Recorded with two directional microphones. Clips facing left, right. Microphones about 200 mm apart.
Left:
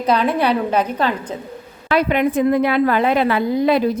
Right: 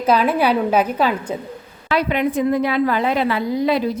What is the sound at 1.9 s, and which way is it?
A woman's voice, 50° left (ahead or behind).